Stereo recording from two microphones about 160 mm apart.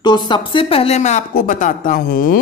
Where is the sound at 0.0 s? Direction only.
25° left (ahead or behind); by 1.2 s 45° left (ahead or behind).